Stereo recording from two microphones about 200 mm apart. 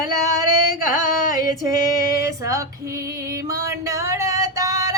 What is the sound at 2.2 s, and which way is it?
Female singing, 15° right (ahead or behind).